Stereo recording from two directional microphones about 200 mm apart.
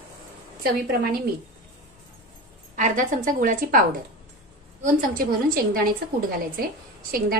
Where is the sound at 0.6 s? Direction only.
50° right (ahead or behind).